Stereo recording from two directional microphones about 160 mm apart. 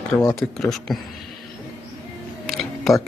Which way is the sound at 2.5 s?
Centre (ahead or behind).